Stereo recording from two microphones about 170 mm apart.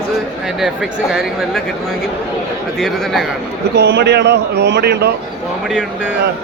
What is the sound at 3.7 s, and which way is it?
A man's voice, 75° right (ahead or behind).